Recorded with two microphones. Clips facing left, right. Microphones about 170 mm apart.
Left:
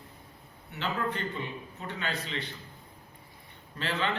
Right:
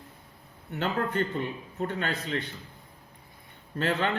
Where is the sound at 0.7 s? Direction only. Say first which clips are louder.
Right 4 dB; 50° right (ahead or behind).